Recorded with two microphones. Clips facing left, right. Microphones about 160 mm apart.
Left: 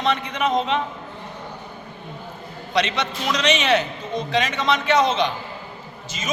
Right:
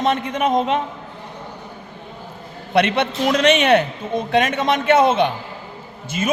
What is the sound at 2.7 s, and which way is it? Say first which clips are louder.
A man's voice: right 6 dB; 55° right (ahead or behind).